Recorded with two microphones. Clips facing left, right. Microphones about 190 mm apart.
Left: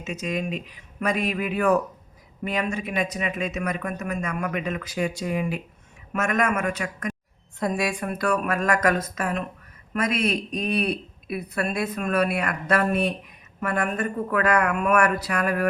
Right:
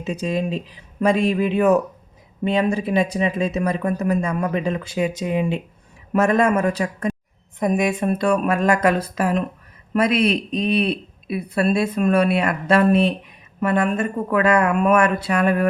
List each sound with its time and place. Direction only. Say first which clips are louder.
0.0 s a man's voice: right 5 dB; 30° right (ahead or behind)
7.6 s speech: right 6 dB; 20° right (ahead or behind)